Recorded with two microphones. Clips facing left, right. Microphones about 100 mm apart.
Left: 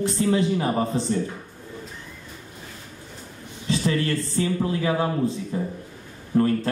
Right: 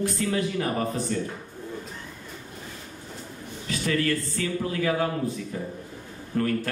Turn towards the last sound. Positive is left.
turn(degrees=25)  # may be behind; listen again after turning